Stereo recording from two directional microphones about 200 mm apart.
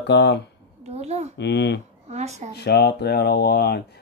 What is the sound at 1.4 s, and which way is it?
Speech, 55° left (ahead or behind).